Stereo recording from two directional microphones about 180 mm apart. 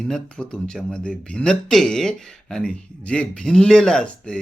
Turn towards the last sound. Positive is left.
turn(degrees=5)  # may be behind; listen again after turning